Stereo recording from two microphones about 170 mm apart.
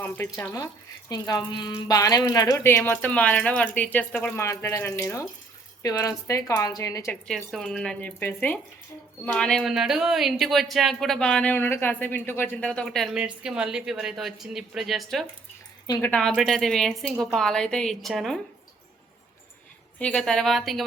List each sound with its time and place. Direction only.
0.0 s speech: 15° left (ahead or behind)
7.3 s speech: 5° left (ahead or behind)
20.0 s speech: 5° left (ahead or behind)